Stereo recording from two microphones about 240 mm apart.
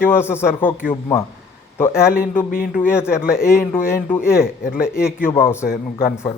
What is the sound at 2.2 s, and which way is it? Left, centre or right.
Speech, centre.